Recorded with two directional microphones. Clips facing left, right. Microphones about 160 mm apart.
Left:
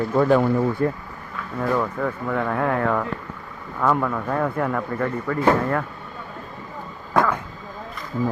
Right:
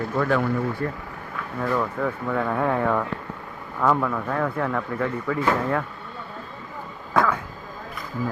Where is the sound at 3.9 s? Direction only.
5° left (ahead or behind).